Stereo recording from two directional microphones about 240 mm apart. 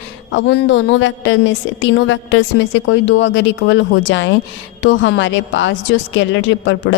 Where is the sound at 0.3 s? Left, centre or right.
Left.